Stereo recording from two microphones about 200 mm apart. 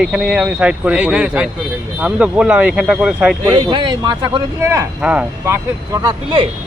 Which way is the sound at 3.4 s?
20° right (ahead or behind).